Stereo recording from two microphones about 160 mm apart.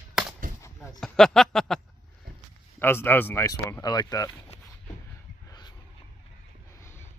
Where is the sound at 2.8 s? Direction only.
15° left (ahead or behind).